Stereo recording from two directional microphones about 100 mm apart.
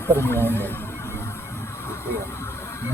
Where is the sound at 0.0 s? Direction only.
25° left (ahead or behind).